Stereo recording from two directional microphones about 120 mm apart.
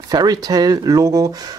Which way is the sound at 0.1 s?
35° right (ahead or behind).